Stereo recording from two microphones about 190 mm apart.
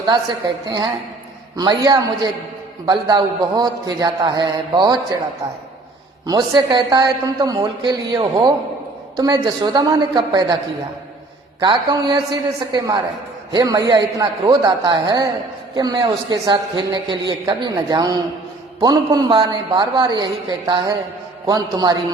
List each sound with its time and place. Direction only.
0.1 s speech: 25° right (ahead or behind)
6.2 s speech: 25° right (ahead or behind)
11.6 s speech: 20° right (ahead or behind)